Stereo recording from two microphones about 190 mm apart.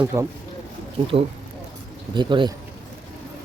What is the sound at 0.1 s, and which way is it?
Speech, 15° right (ahead or behind).